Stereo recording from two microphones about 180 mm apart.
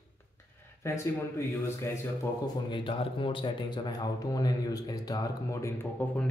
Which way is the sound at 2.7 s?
30° left (ahead or behind).